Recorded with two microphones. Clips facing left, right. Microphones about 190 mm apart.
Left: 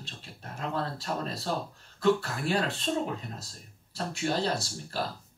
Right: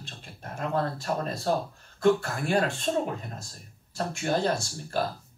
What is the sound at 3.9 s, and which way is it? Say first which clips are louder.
Speech: right 2 dB; 50° right (ahead or behind).